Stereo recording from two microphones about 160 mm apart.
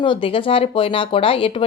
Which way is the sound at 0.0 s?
30° left (ahead or behind).